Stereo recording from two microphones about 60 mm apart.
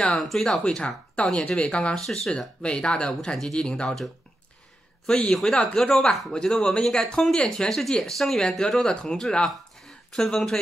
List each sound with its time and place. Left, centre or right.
0.2 s speech: centre
5.0 s a man's voice: centre